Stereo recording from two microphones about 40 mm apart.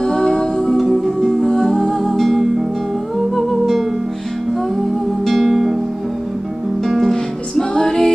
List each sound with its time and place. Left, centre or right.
0.0 s music: centre
0.7 s music: centre
1.5 s music: centre
1.8 s music: centre
3.3 s humming: centre
5.4 s music: centre
6.9 s music: centre
7.5 s music: centre